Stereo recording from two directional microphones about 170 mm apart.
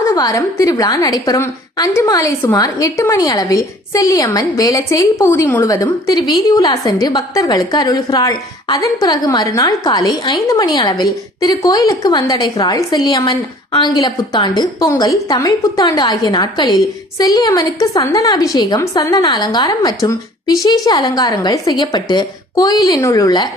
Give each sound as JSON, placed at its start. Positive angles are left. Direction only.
{"t": 0.2, "sound": "a woman's voice", "side_deg": 20}